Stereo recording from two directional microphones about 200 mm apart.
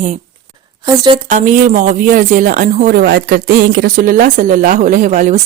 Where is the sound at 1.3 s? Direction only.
40° right (ahead or behind).